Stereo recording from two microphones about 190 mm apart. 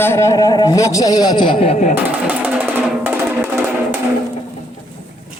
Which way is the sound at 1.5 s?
35° left (ahead or behind).